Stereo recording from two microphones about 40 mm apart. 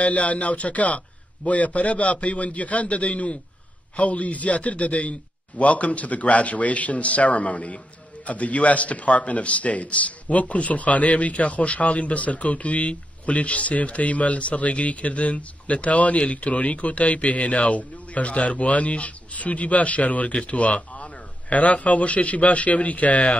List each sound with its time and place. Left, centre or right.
0.0 s a man's voice: left